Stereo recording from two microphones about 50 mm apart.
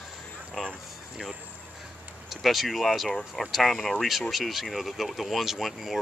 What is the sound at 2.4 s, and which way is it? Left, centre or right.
Speech, centre.